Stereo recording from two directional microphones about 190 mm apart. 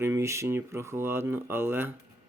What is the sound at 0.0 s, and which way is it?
Speech, 15° right (ahead or behind).